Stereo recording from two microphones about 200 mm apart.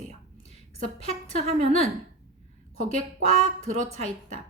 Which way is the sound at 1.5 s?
30° right (ahead or behind).